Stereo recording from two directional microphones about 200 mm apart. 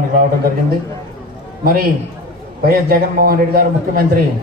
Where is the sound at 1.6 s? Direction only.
45° right (ahead or behind).